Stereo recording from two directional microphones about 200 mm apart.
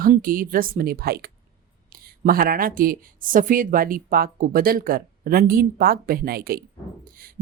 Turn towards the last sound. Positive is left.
turn(degrees=-45)  # may be behind; listen again after turning